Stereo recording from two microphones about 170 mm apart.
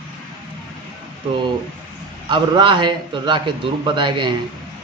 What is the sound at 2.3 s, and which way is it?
A man's voice, 30° right (ahead or behind).